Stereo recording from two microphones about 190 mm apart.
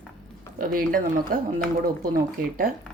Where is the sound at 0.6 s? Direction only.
50° right (ahead or behind).